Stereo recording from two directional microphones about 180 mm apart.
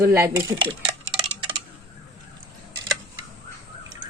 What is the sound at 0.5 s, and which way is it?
Dishes, 30° right (ahead or behind).